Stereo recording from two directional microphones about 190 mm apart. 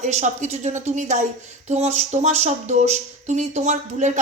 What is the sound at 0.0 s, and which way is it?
Speech, 40° right (ahead or behind).